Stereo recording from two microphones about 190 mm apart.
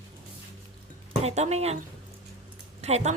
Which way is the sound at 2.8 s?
35° right (ahead or behind).